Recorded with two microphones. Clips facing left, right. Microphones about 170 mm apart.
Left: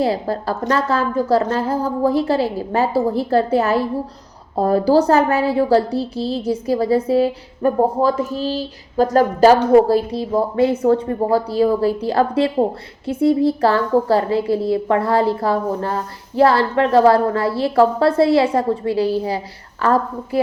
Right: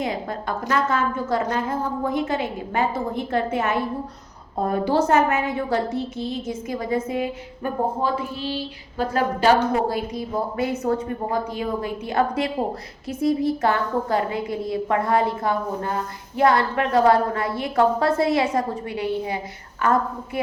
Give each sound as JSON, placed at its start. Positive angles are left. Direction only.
{"t": 0.0, "sound": "a woman's voice", "side_deg": 35}